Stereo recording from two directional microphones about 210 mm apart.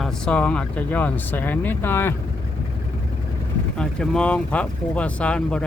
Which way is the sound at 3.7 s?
5° left (ahead or behind).